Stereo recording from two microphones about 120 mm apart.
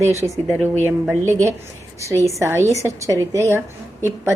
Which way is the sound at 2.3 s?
25° right (ahead or behind).